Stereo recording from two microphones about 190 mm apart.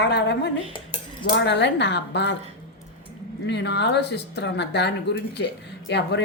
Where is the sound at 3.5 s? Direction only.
65° left (ahead or behind).